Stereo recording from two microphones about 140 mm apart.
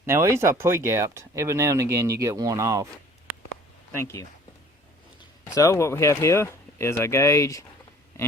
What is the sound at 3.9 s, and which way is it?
Speech, 20° left (ahead or behind).